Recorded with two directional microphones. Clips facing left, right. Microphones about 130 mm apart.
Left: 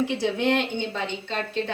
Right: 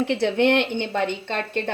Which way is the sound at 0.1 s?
70° right (ahead or behind).